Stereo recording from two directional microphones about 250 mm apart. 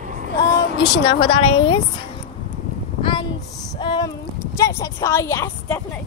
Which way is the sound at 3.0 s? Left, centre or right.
Centre.